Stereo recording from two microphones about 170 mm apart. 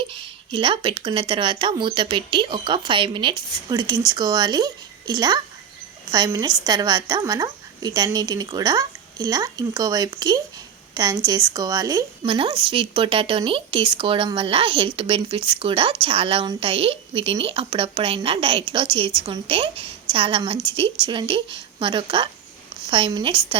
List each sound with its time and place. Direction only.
0.0 s a woman's voice: 30° right (ahead or behind)
12.2 s a woman's voice: 30° right (ahead or behind)